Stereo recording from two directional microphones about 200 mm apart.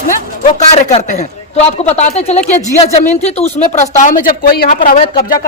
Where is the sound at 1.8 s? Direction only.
35° left (ahead or behind).